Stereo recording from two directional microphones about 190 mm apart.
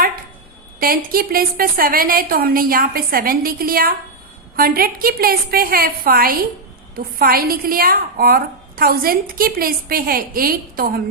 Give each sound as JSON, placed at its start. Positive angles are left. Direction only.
{"t": 0.8, "sound": "speech", "side_deg": -50}